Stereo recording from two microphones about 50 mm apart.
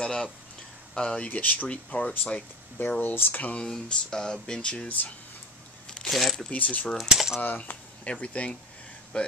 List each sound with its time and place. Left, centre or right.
0.0 s speech: centre
3.0 s speech: left
3.9 s speech: centre
4.8 s speech: left
6.0 s speech: centre
6.5 s speech: left
7.1 s speech: centre
7.4 s speech: left
8.0 s speech: left